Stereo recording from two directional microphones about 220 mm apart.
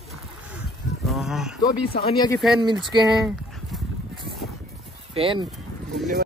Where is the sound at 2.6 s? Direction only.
20° right (ahead or behind).